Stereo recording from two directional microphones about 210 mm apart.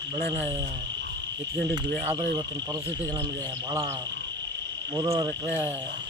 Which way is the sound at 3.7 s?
15° right (ahead or behind).